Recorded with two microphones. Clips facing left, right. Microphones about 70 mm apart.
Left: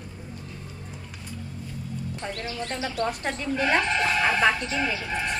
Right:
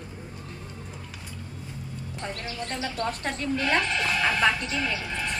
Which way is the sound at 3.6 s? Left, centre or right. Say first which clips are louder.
Left 4 dB; centre.